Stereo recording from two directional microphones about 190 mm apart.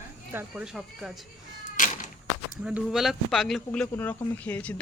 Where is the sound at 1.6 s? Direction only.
45° left (ahead or behind).